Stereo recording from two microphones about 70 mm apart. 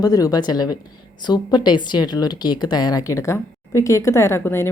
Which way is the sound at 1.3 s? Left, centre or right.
Left.